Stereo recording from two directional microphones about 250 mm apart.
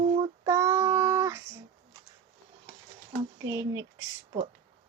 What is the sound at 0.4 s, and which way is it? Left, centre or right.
Child singing, centre.